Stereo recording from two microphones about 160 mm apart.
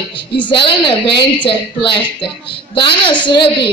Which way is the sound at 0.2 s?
30° left (ahead or behind).